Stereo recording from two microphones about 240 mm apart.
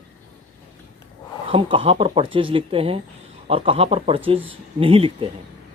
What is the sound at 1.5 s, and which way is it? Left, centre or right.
Speech, right.